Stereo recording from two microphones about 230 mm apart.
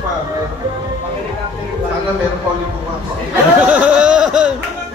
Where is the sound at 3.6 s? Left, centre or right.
Centre.